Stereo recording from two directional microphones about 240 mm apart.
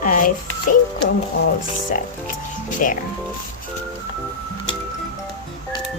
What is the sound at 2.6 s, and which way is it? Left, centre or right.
Speech, left.